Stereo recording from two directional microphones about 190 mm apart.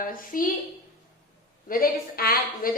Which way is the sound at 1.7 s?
50° left (ahead or behind).